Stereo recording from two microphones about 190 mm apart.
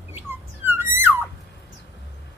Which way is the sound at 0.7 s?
10° right (ahead or behind).